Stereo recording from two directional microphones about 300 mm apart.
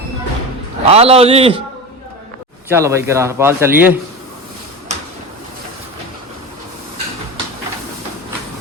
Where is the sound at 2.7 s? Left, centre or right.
Centre.